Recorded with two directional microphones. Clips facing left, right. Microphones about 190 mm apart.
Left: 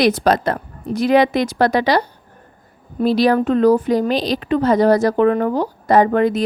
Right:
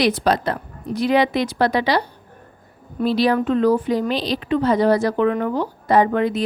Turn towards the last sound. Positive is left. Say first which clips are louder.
# left 3 dB
turn(degrees=45)  # may be behind; listen again after turning